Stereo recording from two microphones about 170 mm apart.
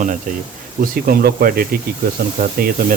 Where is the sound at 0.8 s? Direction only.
60° right (ahead or behind).